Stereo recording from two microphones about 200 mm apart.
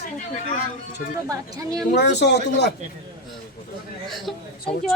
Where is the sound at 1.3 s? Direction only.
15° right (ahead or behind).